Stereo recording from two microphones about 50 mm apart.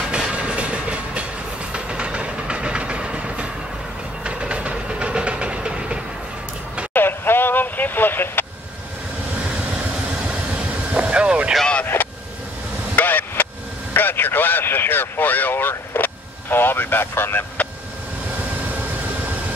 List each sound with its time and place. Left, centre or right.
0.3 s train: right
6.9 s vehicle: left
10.9 s vehicle: right
11.8 s vehicle: left
13.9 s a sound: left